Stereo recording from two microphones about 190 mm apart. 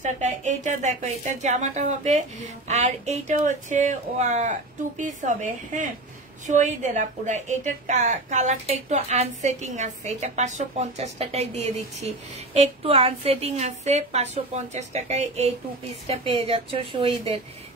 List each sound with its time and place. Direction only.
0.0 s a woman's voice: 40° right (ahead or behind)